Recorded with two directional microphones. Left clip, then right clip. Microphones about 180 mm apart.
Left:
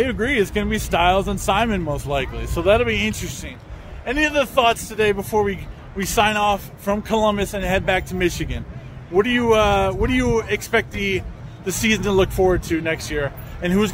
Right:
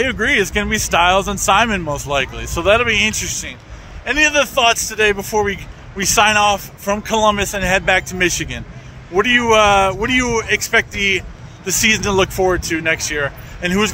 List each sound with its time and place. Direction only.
0.0 s speech: 5° right (ahead or behind)